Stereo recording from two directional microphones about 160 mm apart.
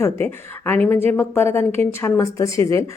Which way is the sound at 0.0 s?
15° left (ahead or behind).